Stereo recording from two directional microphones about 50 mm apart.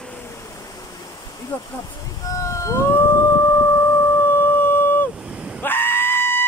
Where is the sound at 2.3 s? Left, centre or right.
Left.